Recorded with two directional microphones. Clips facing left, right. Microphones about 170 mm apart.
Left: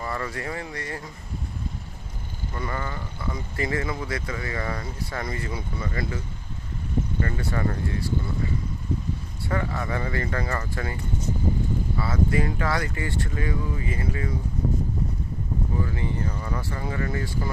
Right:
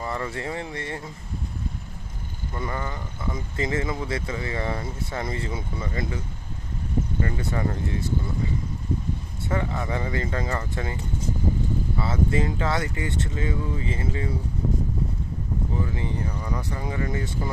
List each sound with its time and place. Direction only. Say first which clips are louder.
0.0 s speech: right 1 dB; 20° right (ahead or behind)
2.6 s speech: right 1 dB; 20° right (ahead or behind)
7.2 s speech: even; 15° right (ahead or behind)
9.5 s speech: right 1 dB; 20° right (ahead or behind)
11.9 s speech: even; 25° right (ahead or behind)
15.8 s speech: even; 20° right (ahead or behind)